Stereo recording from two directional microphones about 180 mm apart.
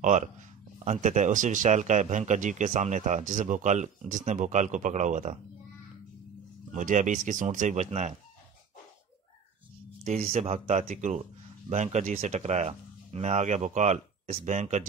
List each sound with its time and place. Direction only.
0.8 s speech: 40° right (ahead or behind)
6.7 s speech: 45° right (ahead or behind)
10.0 s speech: 35° right (ahead or behind)